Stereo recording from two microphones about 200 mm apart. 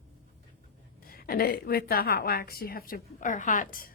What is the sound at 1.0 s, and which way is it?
A woman's voice, 50° left (ahead or behind).